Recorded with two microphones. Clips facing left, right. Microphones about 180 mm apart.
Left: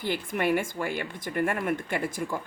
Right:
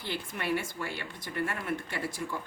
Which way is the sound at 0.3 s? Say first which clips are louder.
Left 6 dB; 50° left (ahead or behind).